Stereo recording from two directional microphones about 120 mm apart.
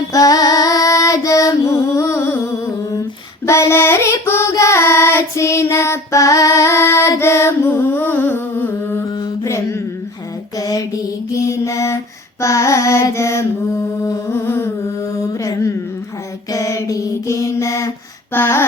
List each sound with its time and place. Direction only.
0.1 s female singing: 30° left (ahead or behind)
2.9 s child singing: 25° left (ahead or behind)
10.6 s music: 30° left (ahead or behind)
11.3 s mantra: 25° left (ahead or behind)
12.4 s carnatic music: 25° left (ahead or behind)
14.0 s humming: 20° left (ahead or behind)
15.2 s mantra: 25° left (ahead or behind)
18.3 s a sound: 20° left (ahead or behind)